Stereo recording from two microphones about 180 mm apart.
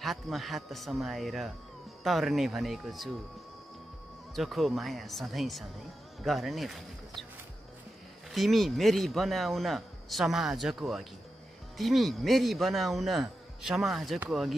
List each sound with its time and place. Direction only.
0.0 s speech: centre (ahead or behind)
4.4 s speech: centre (ahead or behind)
8.3 s speech: centre (ahead or behind)